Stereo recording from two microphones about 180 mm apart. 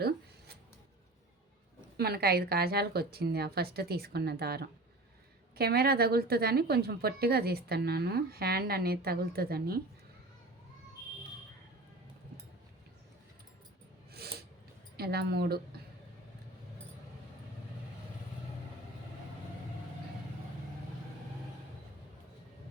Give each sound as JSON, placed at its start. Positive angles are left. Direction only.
{"t": 2.0, "sound": "a woman's voice", "side_deg": -60}
{"t": 14.1, "sound": "a sound", "side_deg": -60}
{"t": 14.9, "sound": "a woman's voice", "side_deg": -60}